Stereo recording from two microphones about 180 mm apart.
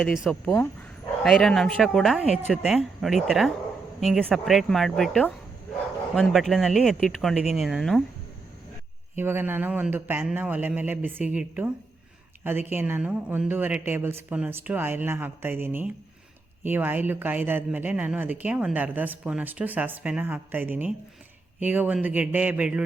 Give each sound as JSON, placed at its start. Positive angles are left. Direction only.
{"t": 0.0, "sound": "speech", "side_deg": 0}
{"t": 9.1, "sound": "speech", "side_deg": -10}